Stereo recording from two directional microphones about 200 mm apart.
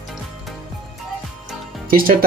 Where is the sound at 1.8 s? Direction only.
45° right (ahead or behind).